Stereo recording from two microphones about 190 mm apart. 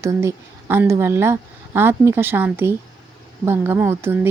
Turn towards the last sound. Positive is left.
turn(degrees=-15)  # may be behind; listen again after turning